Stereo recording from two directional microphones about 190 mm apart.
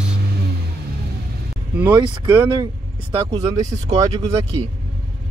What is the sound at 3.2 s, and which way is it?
Speech, 25° right (ahead or behind).